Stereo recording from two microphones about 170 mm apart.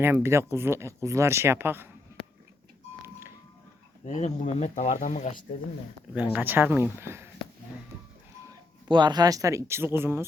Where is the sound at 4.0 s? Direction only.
40° left (ahead or behind).